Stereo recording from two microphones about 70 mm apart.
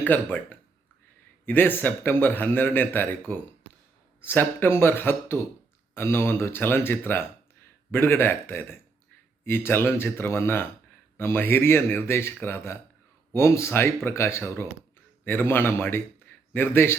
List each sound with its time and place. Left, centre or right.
0.0 s a man's voice: left